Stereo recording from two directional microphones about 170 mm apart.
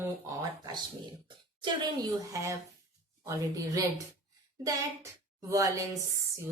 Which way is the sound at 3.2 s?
20° right (ahead or behind).